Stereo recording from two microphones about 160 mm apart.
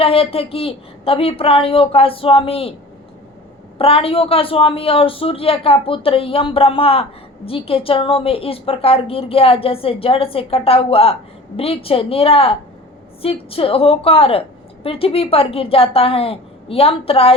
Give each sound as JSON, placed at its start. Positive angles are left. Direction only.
{"t": 0.0, "sound": "speech", "side_deg": 35}
{"t": 3.8, "sound": "speech", "side_deg": 35}